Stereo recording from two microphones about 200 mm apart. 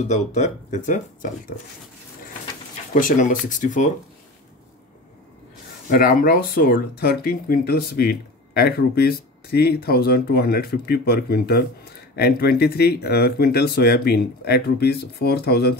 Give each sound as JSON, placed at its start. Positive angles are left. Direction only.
{"t": 0.1, "sound": "speech", "side_deg": 35}
{"t": 2.9, "sound": "speech", "side_deg": 40}
{"t": 5.9, "sound": "speech", "side_deg": 50}